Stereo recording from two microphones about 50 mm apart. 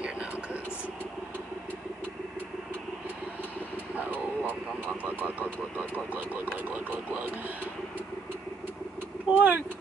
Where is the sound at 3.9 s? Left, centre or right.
Right.